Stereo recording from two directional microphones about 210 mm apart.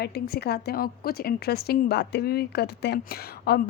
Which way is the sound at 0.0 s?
50° left (ahead or behind).